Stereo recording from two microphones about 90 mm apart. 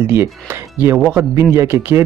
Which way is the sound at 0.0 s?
25° right (ahead or behind).